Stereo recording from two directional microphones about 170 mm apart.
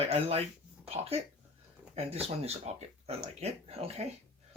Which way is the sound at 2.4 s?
40° right (ahead or behind).